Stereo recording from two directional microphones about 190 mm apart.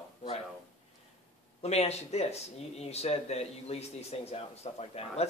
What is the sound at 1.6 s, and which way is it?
Speech, 35° left (ahead or behind).